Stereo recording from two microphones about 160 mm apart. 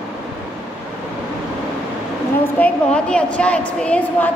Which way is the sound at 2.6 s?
5° left (ahead or behind).